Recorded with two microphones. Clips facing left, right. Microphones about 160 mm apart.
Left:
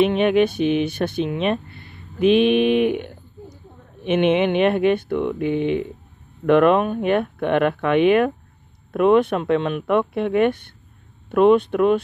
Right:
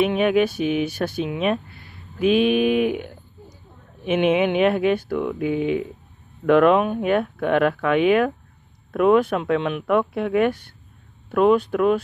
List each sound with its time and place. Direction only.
0.0 s speech: 5° right (ahead or behind)